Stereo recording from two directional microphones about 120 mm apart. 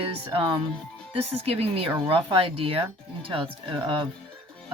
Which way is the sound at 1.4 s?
55° right (ahead or behind).